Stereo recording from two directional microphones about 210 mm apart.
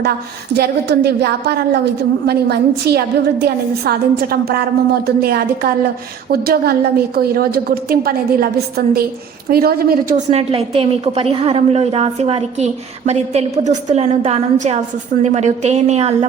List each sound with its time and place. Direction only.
0.5 s a woman's voice: 50° right (ahead or behind)
10.2 s a woman's voice: 30° right (ahead or behind)